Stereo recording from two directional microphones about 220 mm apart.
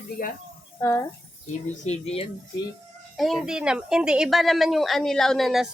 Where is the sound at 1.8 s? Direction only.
30° left (ahead or behind).